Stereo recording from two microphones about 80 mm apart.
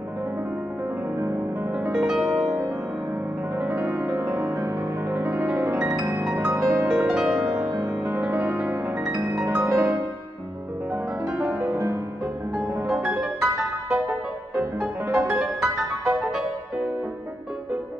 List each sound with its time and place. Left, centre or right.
1.9 s music: centre
3.5 s music: right
4.4 s music: right
5.1 s music: right
6.4 s music: centre
11.3 s music: centre
11.7 s music: right
12.5 s music: centre